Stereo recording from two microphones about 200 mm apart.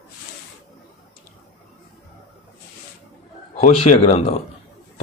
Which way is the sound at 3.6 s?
30° left (ahead or behind).